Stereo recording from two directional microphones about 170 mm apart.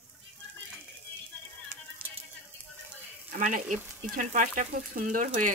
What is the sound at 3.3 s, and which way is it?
Speech, 50° right (ahead or behind).